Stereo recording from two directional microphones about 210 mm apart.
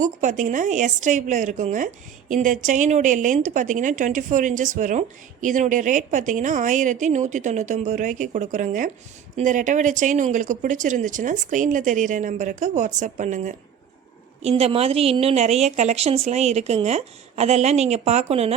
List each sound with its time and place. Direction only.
0.0 s a woman's voice: 35° right (ahead or behind)